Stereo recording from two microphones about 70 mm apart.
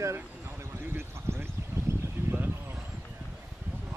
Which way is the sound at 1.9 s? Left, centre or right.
Right.